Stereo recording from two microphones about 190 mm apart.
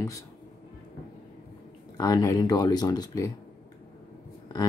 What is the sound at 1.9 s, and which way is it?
Speech, 20° left (ahead or behind).